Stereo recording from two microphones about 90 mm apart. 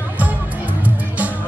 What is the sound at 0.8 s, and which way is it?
Music, 15° right (ahead or behind).